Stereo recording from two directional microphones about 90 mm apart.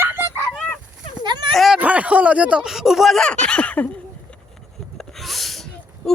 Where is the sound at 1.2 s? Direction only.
55° right (ahead or behind).